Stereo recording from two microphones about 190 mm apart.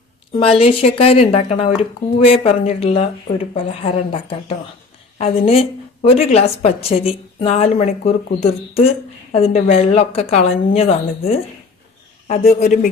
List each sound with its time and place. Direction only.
0.3 s speech: 30° left (ahead or behind)